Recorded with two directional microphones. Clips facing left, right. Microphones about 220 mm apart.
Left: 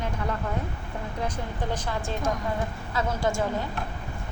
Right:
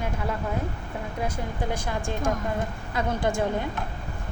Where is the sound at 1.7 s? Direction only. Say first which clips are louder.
Right 1 dB; 10° right (ahead or behind).